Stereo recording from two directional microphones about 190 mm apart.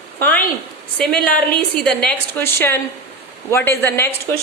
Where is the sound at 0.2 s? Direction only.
10° left (ahead or behind).